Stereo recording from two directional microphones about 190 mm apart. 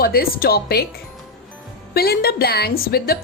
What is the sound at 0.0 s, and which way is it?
Speech, 50° left (ahead or behind).